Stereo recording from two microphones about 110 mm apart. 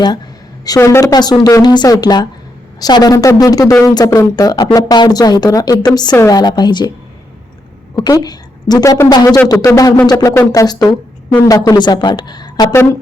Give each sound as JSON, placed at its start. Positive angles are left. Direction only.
{"t": 0.6, "sound": "speech", "side_deg": 30}
{"t": 7.9, "sound": "a woman's voice", "side_deg": 35}
{"t": 12.7, "sound": "speech", "side_deg": 25}